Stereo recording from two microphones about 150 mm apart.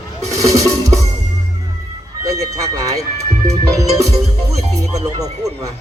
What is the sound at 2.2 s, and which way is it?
A man's voice, 25° right (ahead or behind).